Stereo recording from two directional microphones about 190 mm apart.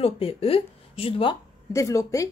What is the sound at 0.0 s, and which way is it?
Speech, 30° left (ahead or behind).